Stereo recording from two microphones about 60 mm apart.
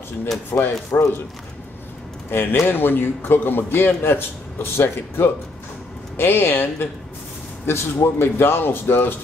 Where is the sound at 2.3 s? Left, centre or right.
Left.